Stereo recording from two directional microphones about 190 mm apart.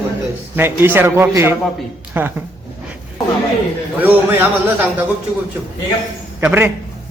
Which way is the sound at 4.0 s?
10° right (ahead or behind).